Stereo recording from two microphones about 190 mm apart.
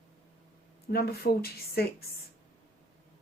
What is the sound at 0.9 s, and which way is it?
Speech, 55° left (ahead or behind).